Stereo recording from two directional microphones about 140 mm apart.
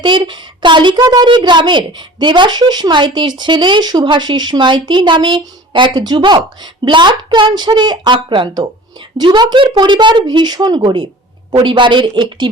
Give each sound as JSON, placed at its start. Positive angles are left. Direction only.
{"t": 0.0, "sound": "a woman's voice", "side_deg": -35}